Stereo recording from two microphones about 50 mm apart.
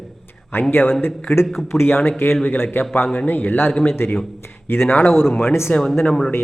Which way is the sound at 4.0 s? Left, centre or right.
Left.